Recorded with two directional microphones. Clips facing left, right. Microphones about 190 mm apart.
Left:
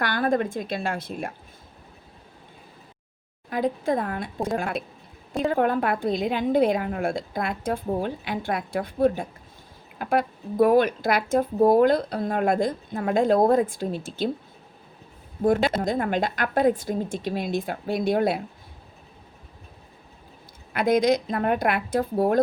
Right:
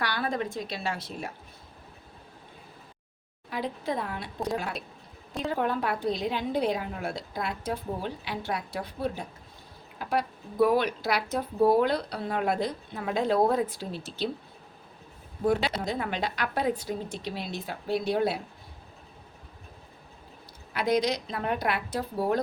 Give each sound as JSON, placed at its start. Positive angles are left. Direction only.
{"t": 0.0, "sound": "speech", "side_deg": 50}
{"t": 3.5, "sound": "speech", "side_deg": 50}
{"t": 15.4, "sound": "speech", "side_deg": 45}
{"t": 20.7, "sound": "speech", "side_deg": 50}